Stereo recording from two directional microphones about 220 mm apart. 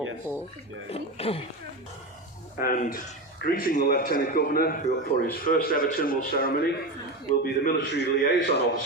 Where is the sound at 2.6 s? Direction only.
40° left (ahead or behind).